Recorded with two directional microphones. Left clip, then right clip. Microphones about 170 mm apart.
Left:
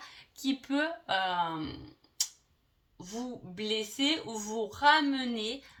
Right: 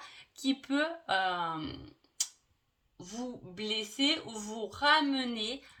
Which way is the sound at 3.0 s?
30° right (ahead or behind).